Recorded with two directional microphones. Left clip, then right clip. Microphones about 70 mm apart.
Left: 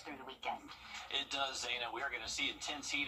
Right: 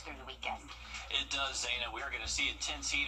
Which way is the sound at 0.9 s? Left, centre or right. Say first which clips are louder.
Right 4 dB; left.